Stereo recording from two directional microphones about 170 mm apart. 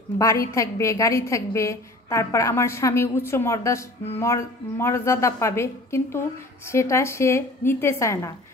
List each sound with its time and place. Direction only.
0.2 s a woman's voice: 20° left (ahead or behind)